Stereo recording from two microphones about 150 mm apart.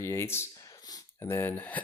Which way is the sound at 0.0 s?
15° left (ahead or behind).